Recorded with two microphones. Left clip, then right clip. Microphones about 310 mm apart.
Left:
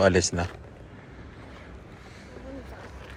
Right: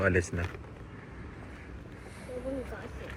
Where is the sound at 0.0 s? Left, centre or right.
Left.